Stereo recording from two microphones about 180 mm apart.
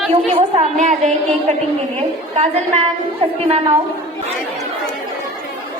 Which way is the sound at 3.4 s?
30° right (ahead or behind).